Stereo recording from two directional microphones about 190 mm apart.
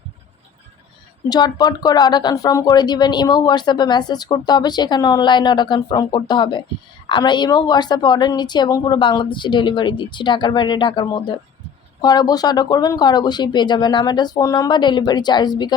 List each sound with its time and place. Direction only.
1.3 s speech: 20° left (ahead or behind)